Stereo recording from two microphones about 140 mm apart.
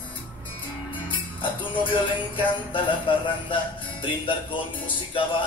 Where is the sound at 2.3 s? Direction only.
40° left (ahead or behind).